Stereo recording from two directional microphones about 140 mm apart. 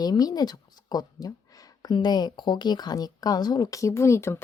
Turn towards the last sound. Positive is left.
turn(degrees=20)  # may be behind; listen again after turning